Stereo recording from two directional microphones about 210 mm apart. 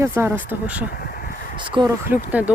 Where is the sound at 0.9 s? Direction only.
45° left (ahead or behind).